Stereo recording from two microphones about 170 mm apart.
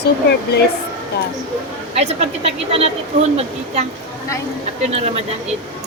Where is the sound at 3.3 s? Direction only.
35° right (ahead or behind).